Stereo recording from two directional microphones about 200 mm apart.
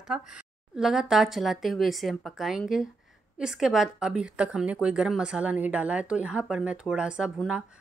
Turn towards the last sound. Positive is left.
turn(degrees=-5)  # may be behind; listen again after turning